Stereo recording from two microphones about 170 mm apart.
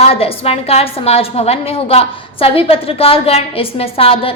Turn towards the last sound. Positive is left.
turn(degrees=35)  # may be behind; listen again after turning